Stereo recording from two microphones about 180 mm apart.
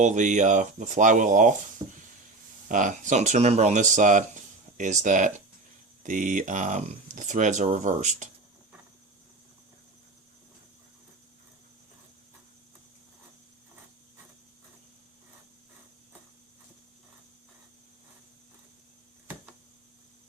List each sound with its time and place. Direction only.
0.0 s speech: 40° right (ahead or behind)
1.8 s a sound: 30° right (ahead or behind)
2.6 s speech: 45° right (ahead or behind)